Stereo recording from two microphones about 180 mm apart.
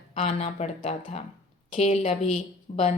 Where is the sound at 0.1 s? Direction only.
35° left (ahead or behind).